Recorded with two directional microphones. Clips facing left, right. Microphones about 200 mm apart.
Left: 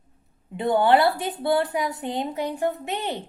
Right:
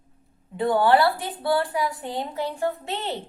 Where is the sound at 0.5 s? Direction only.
20° left (ahead or behind).